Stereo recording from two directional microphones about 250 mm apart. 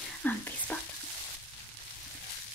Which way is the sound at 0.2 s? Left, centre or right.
Centre.